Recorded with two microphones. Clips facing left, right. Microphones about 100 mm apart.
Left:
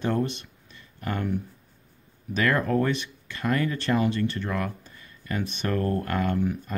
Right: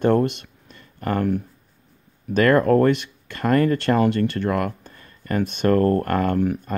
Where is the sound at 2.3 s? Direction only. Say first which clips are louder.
Right 8 dB; 55° right (ahead or behind).